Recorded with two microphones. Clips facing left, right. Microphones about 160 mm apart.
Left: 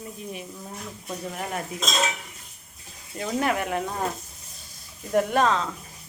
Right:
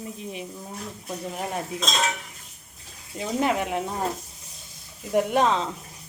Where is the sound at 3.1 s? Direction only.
15° right (ahead or behind).